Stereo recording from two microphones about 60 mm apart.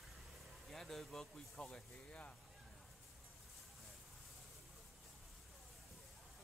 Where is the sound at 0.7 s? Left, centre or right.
Centre.